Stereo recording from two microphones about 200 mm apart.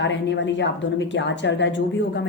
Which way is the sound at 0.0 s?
65° left (ahead or behind).